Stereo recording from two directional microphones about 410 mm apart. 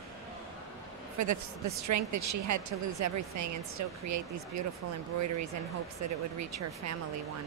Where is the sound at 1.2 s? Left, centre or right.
Right.